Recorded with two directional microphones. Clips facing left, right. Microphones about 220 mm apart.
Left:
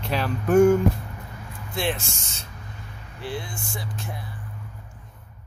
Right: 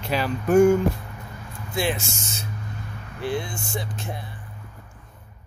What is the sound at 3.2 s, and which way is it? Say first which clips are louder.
Speech: right 5 dB; 15° right (ahead or behind).